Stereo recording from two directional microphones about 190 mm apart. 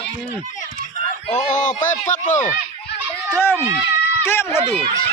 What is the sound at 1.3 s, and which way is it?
Speech, 40° left (ahead or behind).